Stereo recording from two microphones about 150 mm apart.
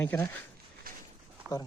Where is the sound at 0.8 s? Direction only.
80° right.